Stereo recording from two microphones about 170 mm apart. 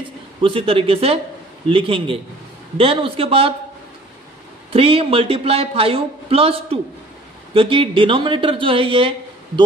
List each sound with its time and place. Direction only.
0.4 s a man's voice: 30° right (ahead or behind)
4.7 s a man's voice: 35° right (ahead or behind)